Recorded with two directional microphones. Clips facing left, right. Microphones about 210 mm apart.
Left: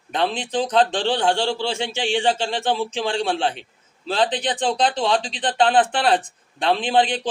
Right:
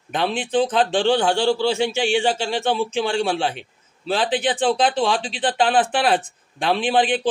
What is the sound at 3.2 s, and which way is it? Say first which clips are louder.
A man's voice: right 1 dB; 10° right (ahead or behind).